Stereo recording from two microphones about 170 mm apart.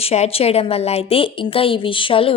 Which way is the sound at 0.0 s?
35° left (ahead or behind).